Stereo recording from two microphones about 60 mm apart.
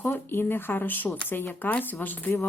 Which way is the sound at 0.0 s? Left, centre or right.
Left.